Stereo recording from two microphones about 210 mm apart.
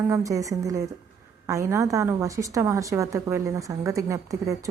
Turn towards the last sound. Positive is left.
turn(degrees=-15)  # may be behind; listen again after turning